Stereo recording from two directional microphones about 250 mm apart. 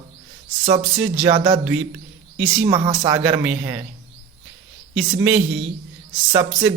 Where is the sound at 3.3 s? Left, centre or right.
Centre.